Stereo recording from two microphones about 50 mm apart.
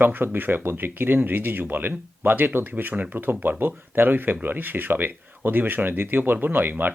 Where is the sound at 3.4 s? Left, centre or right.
Right.